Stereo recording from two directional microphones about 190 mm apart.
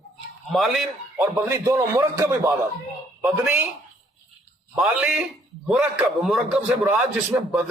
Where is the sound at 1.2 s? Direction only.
15° right (ahead or behind).